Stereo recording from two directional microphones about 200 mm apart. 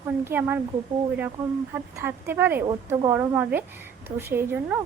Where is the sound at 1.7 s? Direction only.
10° right (ahead or behind).